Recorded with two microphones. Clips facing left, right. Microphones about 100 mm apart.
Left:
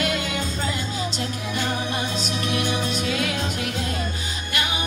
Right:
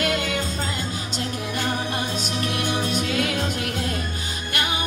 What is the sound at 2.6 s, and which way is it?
Music, 50° right (ahead or behind).